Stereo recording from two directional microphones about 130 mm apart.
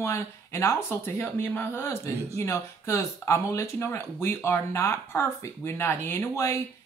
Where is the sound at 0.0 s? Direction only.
20° left (ahead or behind).